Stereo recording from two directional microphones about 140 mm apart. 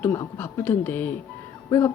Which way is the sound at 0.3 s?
15° left (ahead or behind).